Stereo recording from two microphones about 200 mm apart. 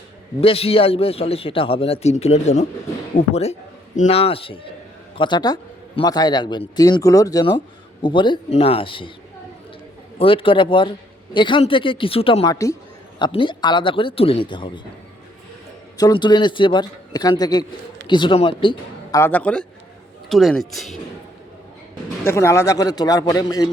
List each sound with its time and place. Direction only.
0.4 s a man's voice: 30° left (ahead or behind)
10.2 s a man's voice: 25° left (ahead or behind)
16.0 s a man's voice: 20° left (ahead or behind)
19.2 s a man's voice: 5° left (ahead or behind)
22.2 s a man's voice: 15° left (ahead or behind)